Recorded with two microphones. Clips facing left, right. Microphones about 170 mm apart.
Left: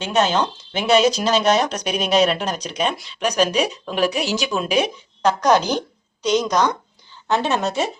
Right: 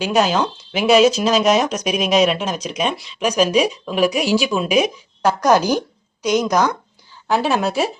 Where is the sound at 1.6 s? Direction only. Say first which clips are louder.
Right 3 dB; 35° left (ahead or behind).